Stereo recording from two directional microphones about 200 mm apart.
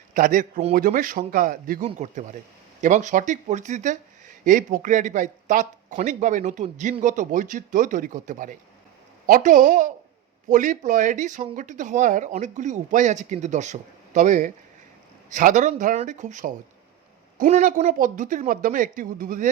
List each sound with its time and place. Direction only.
0.1 s speech: 40° right (ahead or behind)